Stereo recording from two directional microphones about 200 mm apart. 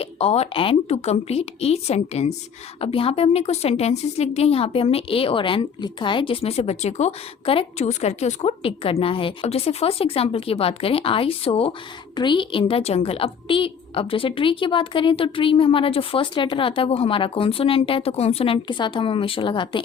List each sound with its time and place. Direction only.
0.0 s a woman's voice: 30° left (ahead or behind)